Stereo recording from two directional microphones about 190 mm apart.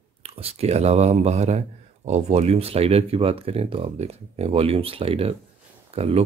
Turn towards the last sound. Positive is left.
turn(degrees=-30)  # may be behind; listen again after turning